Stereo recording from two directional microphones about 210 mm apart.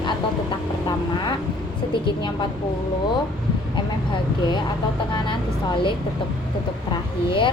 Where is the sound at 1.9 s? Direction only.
20° left (ahead or behind).